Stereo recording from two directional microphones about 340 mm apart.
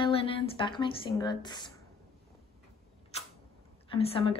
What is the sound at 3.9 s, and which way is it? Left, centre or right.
Speech, centre.